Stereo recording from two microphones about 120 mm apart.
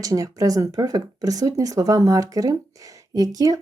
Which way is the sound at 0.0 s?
30° right (ahead or behind).